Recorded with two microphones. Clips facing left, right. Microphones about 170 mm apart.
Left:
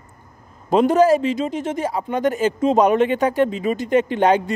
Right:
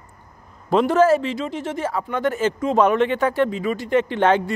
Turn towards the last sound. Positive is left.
turn(degrees=15)  # may be behind; listen again after turning